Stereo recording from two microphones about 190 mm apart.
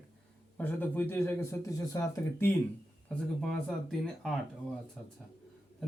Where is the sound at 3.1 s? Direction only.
Centre (ahead or behind).